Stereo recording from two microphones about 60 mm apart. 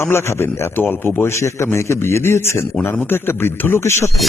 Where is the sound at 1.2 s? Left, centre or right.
Left.